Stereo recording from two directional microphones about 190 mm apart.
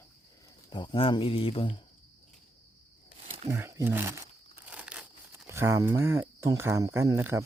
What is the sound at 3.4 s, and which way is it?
Speech, 15° right (ahead or behind).